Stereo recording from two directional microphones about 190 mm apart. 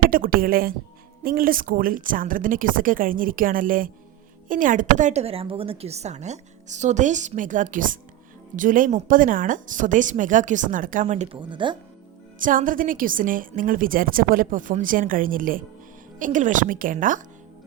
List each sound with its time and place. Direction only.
0.1 s a woman's voice: 50° right (ahead or behind)
11.3 s speech: 25° right (ahead or behind)
12.4 s a woman's voice: 45° right (ahead or behind)